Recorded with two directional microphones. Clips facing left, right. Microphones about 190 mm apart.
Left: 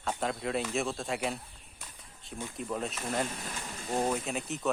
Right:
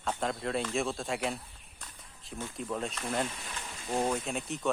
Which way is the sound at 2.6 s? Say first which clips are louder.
Even; centre (ahead or behind).